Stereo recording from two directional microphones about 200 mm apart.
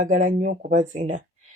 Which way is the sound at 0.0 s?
40° right (ahead or behind).